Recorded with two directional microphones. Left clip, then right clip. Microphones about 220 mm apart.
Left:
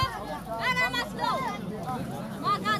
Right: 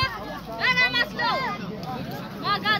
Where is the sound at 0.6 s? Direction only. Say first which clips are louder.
Right 6 dB; 60° left (ahead or behind).